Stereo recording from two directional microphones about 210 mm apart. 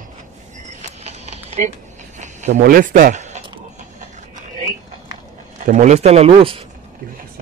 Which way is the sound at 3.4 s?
25° right (ahead or behind).